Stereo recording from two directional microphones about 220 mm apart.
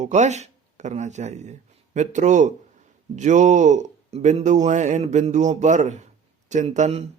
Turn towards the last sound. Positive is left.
turn(degrees=-30)  # may be behind; listen again after turning